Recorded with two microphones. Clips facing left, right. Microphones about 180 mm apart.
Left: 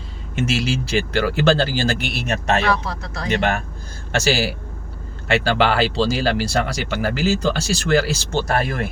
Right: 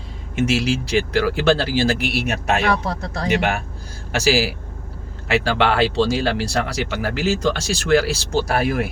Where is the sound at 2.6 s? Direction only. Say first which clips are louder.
Right 1 dB; 50° right (ahead or behind).